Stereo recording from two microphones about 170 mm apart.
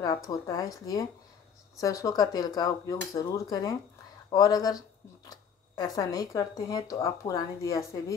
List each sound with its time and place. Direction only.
0.0 s speech: 20° left (ahead or behind)